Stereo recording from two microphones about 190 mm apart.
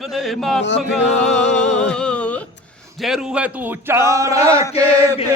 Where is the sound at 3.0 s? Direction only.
Centre (ahead or behind).